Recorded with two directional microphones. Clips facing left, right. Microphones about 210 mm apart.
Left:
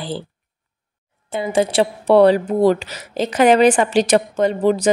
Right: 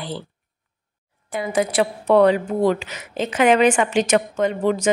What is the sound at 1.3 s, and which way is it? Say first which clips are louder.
A woman's voice: left 3 dB; 25° left (ahead or behind).